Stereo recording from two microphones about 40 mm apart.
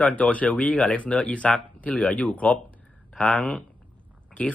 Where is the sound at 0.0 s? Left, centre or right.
Left.